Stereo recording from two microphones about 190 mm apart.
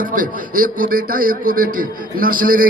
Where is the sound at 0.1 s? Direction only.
45° right (ahead or behind).